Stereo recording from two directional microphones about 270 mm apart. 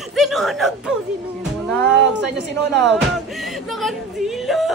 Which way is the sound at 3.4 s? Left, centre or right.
Centre.